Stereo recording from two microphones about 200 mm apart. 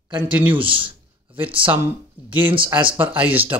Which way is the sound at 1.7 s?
10° right (ahead or behind).